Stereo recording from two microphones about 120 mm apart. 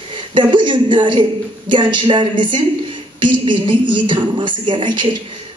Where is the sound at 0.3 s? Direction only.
40° right (ahead or behind).